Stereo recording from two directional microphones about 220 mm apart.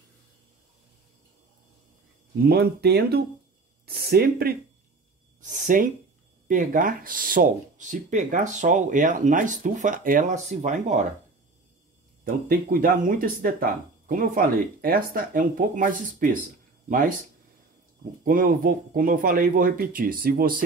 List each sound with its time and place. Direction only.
2.4 s speech: 45° right (ahead or behind)
12.4 s speech: 40° right (ahead or behind)
18.2 s speech: 40° right (ahead or behind)